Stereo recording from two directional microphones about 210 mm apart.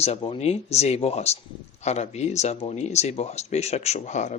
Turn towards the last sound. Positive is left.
turn(degrees=35)  # may be behind; listen again after turning